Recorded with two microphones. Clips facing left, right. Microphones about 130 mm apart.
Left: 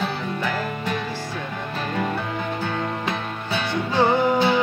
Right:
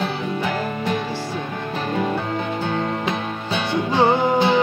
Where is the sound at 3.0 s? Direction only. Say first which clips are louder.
Right 3 dB; 20° right (ahead or behind).